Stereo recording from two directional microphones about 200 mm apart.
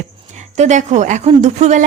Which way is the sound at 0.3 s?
35° right (ahead or behind).